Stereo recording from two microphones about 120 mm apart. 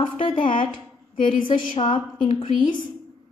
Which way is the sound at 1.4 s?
45° left (ahead or behind).